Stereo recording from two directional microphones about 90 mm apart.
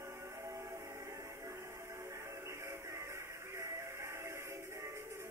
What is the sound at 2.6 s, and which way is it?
Music, 30° right (ahead or behind).